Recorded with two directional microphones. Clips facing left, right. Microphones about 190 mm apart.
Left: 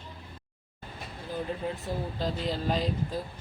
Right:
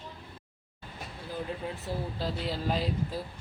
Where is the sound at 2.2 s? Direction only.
5° right (ahead or behind).